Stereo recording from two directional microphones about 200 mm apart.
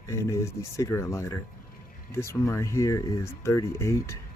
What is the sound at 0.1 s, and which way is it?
Speech, 15° left (ahead or behind).